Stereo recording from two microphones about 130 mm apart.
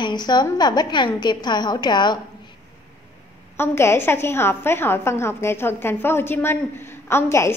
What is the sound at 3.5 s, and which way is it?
A woman's voice, 20° left (ahead or behind).